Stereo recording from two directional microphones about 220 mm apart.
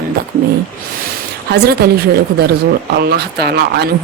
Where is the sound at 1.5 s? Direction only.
45° right (ahead or behind).